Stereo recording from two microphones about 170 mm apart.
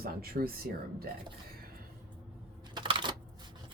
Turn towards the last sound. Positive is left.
turn(degrees=-30)  # may be behind; listen again after turning